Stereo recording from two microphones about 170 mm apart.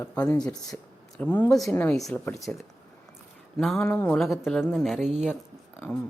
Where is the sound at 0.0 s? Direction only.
10° left (ahead or behind).